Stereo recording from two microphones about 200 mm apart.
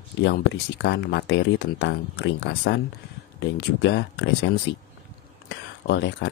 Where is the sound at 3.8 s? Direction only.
60° left (ahead or behind).